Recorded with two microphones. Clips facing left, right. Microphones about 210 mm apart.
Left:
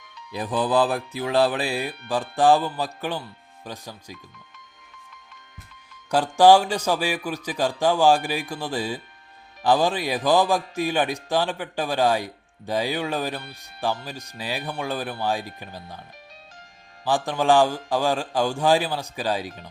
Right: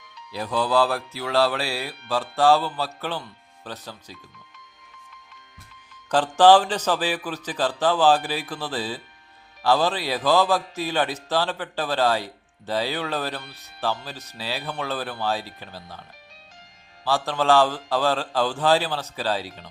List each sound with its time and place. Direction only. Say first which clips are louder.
0.3 s speech: left 1 dB; 15° left (ahead or behind)
6.1 s speech: even; 10° left (ahead or behind)
17.1 s speech: left 1 dB; 15° left (ahead or behind)